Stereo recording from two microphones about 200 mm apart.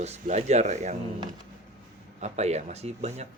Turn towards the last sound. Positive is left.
turn(degrees=-30)  # may be behind; listen again after turning